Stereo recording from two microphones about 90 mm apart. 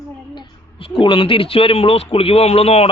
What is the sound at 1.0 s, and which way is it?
A man's voice, 75° left (ahead or behind).